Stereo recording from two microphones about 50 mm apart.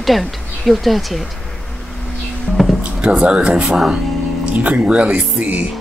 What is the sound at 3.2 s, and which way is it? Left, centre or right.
Speech, centre.